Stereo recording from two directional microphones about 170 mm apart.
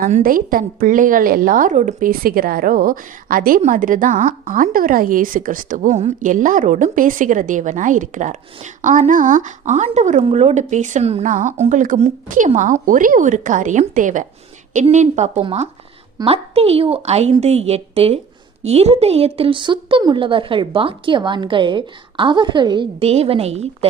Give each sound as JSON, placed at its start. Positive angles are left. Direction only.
{"t": 0.0, "sound": "a woman's voice", "side_deg": -55}